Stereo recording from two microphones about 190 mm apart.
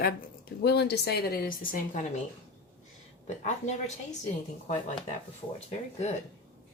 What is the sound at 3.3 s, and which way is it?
Speech, 35° left (ahead or behind).